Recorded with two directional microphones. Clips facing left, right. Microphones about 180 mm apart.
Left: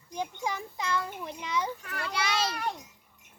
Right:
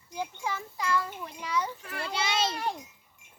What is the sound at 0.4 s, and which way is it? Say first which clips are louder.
A child's voice: right 2 dB; 20° left (ahead or behind).